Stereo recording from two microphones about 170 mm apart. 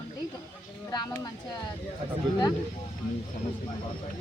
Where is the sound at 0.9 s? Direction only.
20° left (ahead or behind).